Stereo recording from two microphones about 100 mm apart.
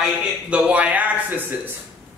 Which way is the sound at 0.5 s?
10° right (ahead or behind).